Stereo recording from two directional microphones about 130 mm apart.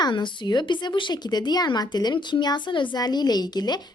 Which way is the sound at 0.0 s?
35° left (ahead or behind).